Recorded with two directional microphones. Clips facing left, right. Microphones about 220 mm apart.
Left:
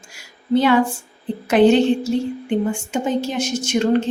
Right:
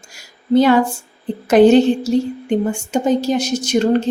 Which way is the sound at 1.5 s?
40° right (ahead or behind).